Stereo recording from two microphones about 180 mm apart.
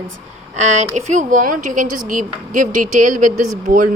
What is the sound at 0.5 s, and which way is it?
Speech, 40° right (ahead or behind).